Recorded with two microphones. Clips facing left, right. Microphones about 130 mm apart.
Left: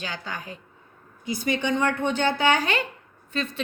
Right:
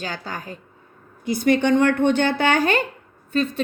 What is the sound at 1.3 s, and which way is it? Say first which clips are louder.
A woman's voice: right 8 dB; 60° right (ahead or behind).